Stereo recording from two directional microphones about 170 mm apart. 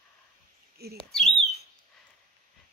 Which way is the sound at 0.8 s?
70° right (ahead or behind).